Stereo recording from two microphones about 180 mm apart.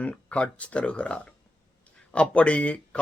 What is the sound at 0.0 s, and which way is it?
Speech, 5° left (ahead or behind).